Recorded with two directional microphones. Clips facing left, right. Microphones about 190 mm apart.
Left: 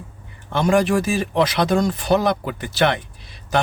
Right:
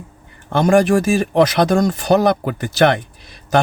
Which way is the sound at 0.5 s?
45° right (ahead or behind).